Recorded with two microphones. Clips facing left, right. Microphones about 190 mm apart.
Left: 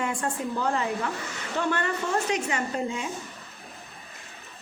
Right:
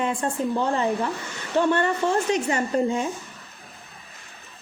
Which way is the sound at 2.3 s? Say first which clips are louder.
Right 5 dB; 35° right (ahead or behind).